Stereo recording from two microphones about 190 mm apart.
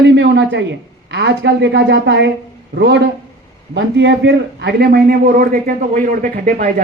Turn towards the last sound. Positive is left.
turn(degrees=-50)  # may be behind; listen again after turning